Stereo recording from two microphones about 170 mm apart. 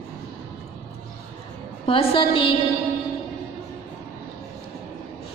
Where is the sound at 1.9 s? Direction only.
30° left (ahead or behind).